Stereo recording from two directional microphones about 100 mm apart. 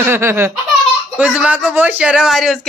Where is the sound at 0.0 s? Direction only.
25° right (ahead or behind).